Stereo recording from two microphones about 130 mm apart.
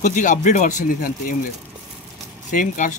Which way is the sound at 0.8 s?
90° left.